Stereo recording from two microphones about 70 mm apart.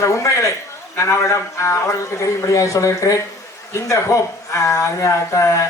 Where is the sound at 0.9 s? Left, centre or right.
Left.